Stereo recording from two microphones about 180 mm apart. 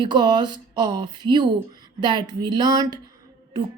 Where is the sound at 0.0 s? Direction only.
25° right (ahead or behind).